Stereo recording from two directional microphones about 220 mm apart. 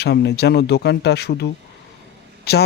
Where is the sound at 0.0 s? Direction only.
50° left (ahead or behind).